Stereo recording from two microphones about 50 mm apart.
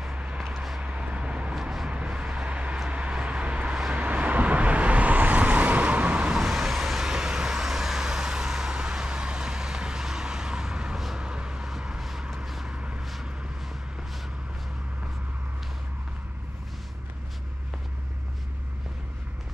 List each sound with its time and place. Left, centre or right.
0.0 s vehicle: right
0.5 s vehicle: centre
0.7 s vehicle: right
1.5 s vehicle: centre
1.9 s vehicle: right
6.3 s vehicle: centre
11.1 s a sound: centre
12.0 s vehicle: centre
12.7 s vehicle: right